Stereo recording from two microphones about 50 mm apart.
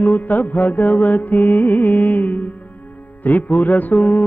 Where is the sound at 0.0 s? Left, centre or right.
Left.